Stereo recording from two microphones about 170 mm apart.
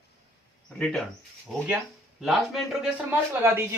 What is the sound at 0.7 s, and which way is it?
Speech, 5° left (ahead or behind).